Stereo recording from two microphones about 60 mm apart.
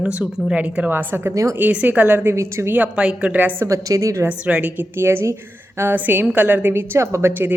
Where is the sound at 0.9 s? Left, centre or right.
Right.